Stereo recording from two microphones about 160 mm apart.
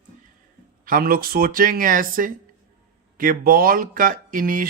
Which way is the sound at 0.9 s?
65° right (ahead or behind).